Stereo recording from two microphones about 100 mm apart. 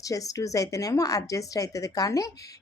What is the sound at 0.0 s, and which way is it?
A woman's voice, 35° left (ahead or behind).